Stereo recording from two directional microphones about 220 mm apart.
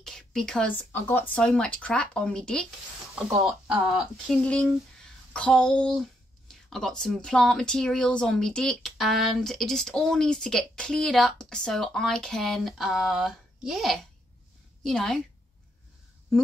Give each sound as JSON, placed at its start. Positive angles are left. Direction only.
{"t": 0.0, "sound": "speech", "side_deg": 0}